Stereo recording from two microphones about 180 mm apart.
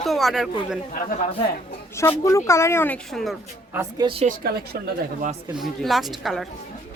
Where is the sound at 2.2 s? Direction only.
15° left (ahead or behind).